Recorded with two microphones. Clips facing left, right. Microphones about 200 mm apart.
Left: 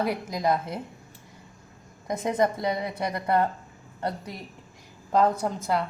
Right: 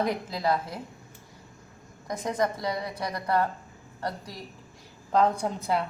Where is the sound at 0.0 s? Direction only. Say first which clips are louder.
Left 1 dB; 10° left (ahead or behind).